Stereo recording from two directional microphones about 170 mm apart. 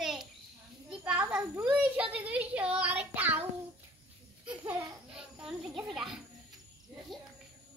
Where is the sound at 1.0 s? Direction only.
5° right (ahead or behind).